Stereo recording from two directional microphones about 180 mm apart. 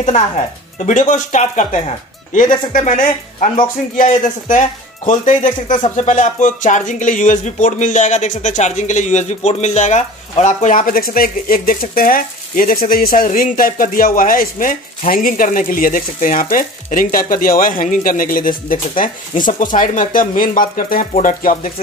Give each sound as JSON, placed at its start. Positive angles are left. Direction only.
{"t": 0.8, "sound": "speech", "side_deg": 45}